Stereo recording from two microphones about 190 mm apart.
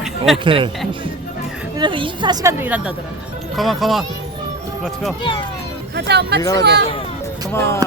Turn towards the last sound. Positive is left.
turn(degrees=15)  # may be behind; listen again after turning